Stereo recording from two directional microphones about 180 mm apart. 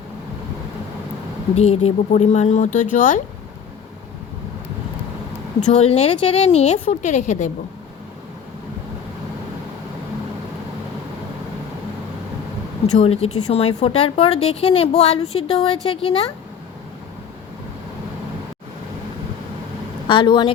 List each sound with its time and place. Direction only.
1.5 s speech: 35° left (ahead or behind)
5.5 s speech: 40° left (ahead or behind)
12.9 s speech: 35° left (ahead or behind)
20.1 s speech: 25° left (ahead or behind)